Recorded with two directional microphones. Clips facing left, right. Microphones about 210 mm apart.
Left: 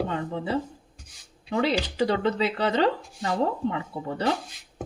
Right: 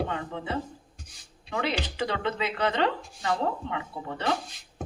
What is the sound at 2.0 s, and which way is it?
Speech, 35° left (ahead or behind).